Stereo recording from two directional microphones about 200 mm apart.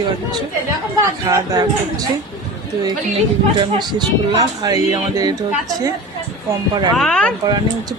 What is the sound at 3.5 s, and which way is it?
Speech, 20° right (ahead or behind).